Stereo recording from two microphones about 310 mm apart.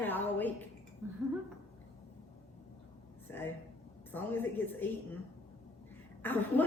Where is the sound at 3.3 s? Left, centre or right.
Centre.